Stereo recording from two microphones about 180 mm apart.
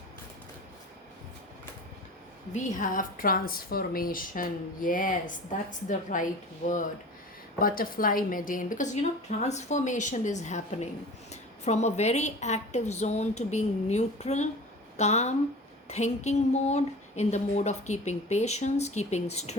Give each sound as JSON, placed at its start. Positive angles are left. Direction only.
{"t": 2.5, "sound": "a woman's voice", "side_deg": 45}
{"t": 7.6, "sound": "a woman's voice", "side_deg": 50}